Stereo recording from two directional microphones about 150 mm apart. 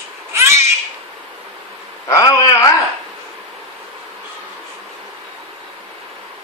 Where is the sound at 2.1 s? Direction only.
20° left (ahead or behind).